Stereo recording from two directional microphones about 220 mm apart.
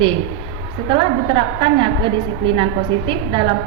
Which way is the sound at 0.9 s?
25° right (ahead or behind).